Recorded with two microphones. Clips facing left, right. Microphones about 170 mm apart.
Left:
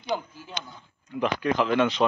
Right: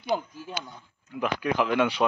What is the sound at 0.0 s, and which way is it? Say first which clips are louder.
Speech: right 2 dB; 5° right (ahead or behind).